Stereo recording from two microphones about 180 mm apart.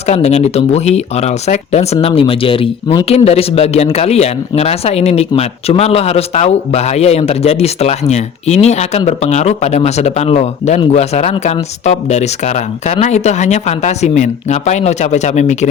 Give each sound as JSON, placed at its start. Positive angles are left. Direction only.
{"t": 0.0, "sound": "speech", "side_deg": 35}